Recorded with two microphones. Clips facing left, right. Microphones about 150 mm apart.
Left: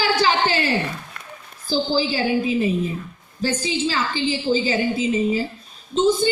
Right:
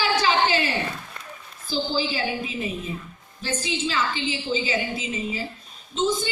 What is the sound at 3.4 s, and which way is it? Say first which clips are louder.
A woman's voice: left 5 dB; 35° left (ahead or behind).